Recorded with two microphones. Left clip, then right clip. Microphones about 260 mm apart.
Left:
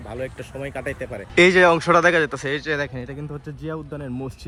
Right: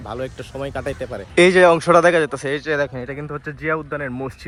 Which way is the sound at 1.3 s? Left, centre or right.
Centre.